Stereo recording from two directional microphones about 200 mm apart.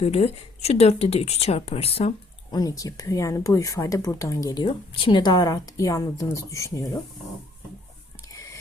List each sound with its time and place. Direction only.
0.0 s speech: 30° left (ahead or behind); by 7.0 s 15° left (ahead or behind)